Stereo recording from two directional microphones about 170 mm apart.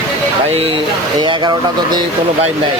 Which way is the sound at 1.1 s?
25° right (ahead or behind).